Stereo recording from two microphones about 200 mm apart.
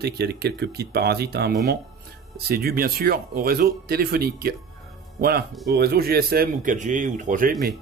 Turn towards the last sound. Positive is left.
turn(degrees=-40)  # may be behind; listen again after turning